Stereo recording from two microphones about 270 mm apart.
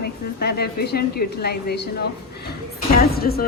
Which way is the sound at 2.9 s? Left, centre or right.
Left.